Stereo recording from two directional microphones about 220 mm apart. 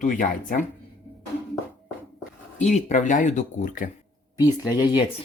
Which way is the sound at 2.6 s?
35° left (ahead or behind).